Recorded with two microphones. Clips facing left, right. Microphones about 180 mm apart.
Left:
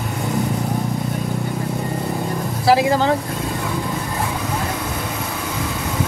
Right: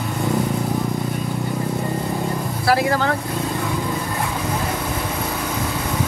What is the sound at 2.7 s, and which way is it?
Vehicle, 20° left (ahead or behind).